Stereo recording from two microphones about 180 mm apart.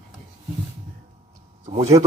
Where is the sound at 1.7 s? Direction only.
35° right (ahead or behind).